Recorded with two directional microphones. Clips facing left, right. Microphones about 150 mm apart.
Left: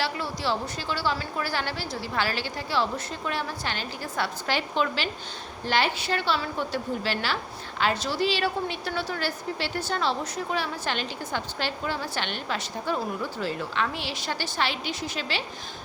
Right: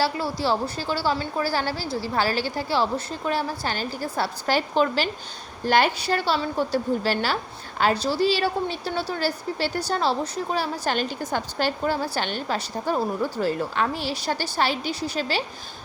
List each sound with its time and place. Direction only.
0.0 s a woman's voice: 35° right (ahead or behind)